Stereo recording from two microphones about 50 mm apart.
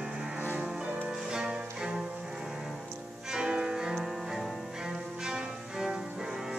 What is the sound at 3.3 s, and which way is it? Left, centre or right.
Music, centre.